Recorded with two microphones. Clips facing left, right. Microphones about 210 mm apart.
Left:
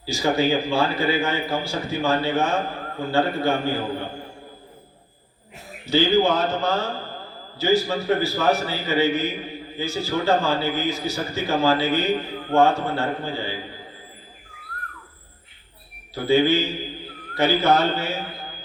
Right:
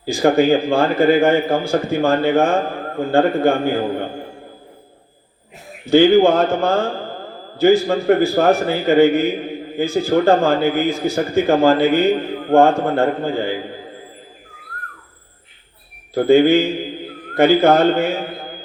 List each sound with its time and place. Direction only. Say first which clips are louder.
0.0 s a man's voice: right 7 dB; 55° right (ahead or behind)
5.9 s a man's voice: right 8 dB; 55° right (ahead or behind)
16.1 s a man's voice: right 7 dB; 55° right (ahead or behind)